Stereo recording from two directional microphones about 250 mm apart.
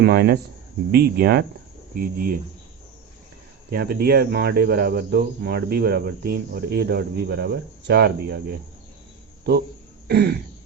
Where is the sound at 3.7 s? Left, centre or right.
Right.